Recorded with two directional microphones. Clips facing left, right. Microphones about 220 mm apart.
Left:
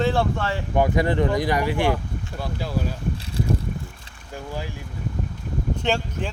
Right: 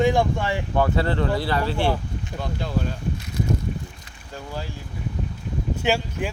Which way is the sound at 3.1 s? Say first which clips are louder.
Even; 30° left (ahead or behind).